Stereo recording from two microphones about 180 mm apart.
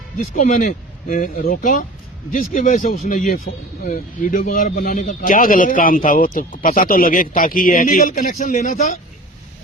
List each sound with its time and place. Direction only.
0.2 s speech: 45° left (ahead or behind)